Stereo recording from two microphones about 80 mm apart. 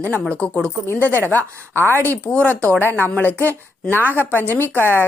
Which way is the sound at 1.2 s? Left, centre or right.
Left.